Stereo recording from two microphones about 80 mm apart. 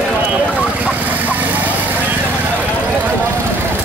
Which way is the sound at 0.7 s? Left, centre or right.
Centre.